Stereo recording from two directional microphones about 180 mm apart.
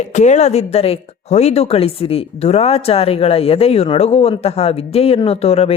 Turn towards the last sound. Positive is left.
turn(degrees=35)  # may be behind; listen again after turning